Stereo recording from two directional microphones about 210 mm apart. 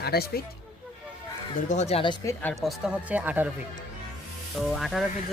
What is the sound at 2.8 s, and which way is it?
Speech, 5° right (ahead or behind).